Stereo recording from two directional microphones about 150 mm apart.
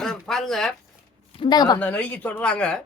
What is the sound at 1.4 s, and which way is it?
Speech, 30° left (ahead or behind).